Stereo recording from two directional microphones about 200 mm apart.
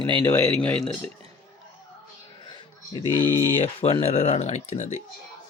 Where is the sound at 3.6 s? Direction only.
30° left (ahead or behind).